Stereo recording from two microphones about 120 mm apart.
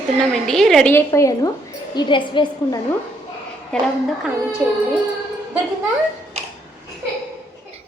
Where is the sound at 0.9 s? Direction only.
25° left (ahead or behind).